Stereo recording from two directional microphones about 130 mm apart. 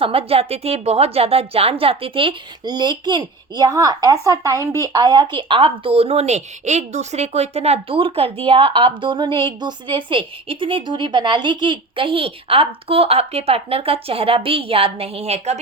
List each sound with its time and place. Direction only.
0.0 s a woman's voice: 45° right (ahead or behind)